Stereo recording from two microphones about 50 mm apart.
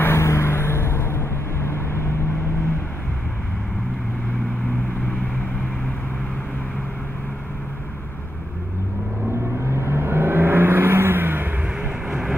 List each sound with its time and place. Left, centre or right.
0.0 s vehicle: left
9.7 s vehicle: right